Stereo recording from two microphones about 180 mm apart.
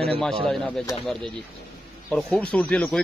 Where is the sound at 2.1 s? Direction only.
5° left (ahead or behind).